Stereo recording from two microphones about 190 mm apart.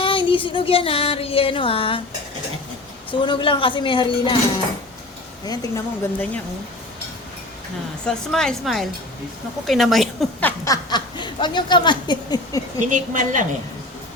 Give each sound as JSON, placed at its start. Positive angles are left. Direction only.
{"t": 0.0, "sound": "a sound", "side_deg": 25}
{"t": 3.1, "sound": "a sound", "side_deg": 25}
{"t": 5.5, "sound": "speech", "side_deg": 15}
{"t": 8.0, "sound": "speech", "side_deg": 5}
{"t": 10.7, "sound": "speech", "side_deg": 20}
{"t": 12.9, "sound": "a woman's voice", "side_deg": -40}